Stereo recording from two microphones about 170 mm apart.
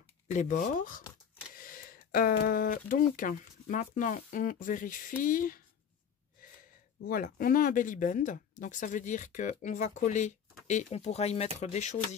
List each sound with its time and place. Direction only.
0.3 s speech: 45° left (ahead or behind)
7.0 s speech: 55° left (ahead or behind); by 12.2 s 40° left (ahead or behind)